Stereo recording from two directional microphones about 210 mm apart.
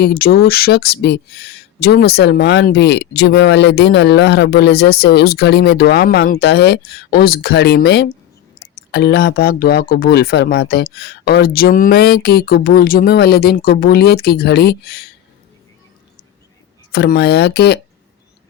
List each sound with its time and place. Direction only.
0.0 s speech: 45° left (ahead or behind)
16.9 s speech: 50° left (ahead or behind)